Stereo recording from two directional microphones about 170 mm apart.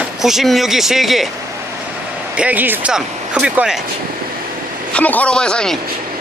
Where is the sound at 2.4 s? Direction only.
10° right (ahead or behind).